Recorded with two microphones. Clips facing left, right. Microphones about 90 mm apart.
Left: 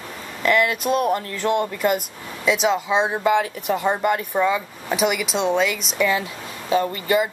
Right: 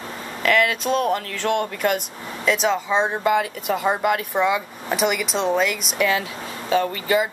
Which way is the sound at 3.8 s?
10° right (ahead or behind).